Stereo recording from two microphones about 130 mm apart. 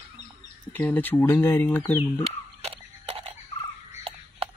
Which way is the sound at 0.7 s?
15° left (ahead or behind).